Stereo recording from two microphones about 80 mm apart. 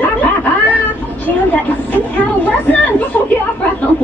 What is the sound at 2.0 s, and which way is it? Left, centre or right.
Chatter, centre.